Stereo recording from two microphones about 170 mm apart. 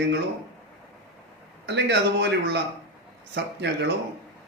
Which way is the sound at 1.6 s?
90° right.